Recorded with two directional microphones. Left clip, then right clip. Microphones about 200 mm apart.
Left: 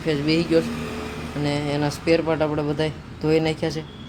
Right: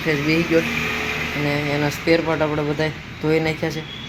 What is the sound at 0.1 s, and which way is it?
Speech, 10° left (ahead or behind).